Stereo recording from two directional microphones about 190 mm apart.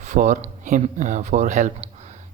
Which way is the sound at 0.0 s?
40° right (ahead or behind).